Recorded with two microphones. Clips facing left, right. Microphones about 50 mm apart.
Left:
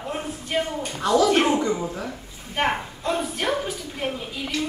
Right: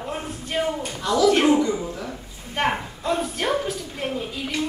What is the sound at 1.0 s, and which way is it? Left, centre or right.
A woman's voice, left.